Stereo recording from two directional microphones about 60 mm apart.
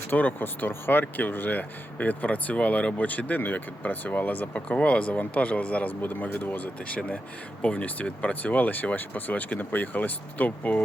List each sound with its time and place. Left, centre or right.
0.1 s speech: left